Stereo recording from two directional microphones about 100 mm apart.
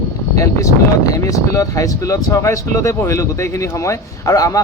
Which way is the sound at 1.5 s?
35° left (ahead or behind).